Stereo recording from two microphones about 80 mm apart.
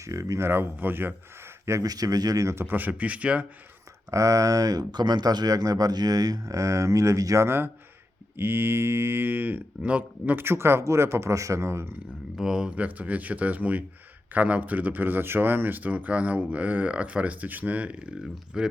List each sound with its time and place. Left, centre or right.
0.0 s speech: right
1.6 s speech: right
1.9 s speech: right
2.6 s speech: right
4.1 s speech: right
7.4 s speech: right
12.4 s speech: centre